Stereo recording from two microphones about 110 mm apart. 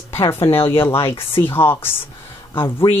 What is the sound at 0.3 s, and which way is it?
Speech, 20° left (ahead or behind).